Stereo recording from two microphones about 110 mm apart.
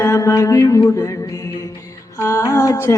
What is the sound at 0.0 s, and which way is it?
Mantra, 30° left (ahead or behind).